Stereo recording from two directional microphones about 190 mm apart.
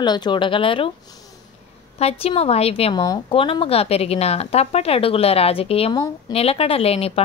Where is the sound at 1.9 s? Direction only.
30° left (ahead or behind).